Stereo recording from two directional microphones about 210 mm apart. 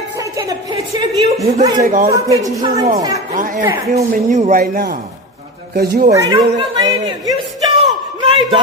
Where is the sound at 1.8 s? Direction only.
40° right (ahead or behind).